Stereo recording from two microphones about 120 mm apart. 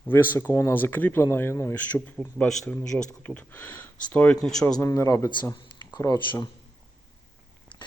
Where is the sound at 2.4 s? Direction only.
5° left (ahead or behind).